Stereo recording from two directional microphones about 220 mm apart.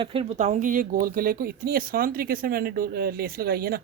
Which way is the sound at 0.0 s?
25° right (ahead or behind).